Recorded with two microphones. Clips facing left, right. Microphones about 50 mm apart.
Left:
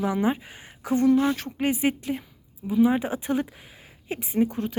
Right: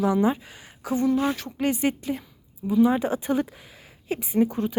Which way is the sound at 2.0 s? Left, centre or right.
Centre.